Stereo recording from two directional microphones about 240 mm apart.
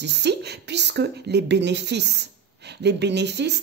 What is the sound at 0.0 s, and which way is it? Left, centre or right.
Speech, right.